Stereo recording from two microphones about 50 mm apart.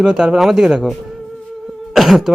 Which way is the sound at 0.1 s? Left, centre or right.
Centre.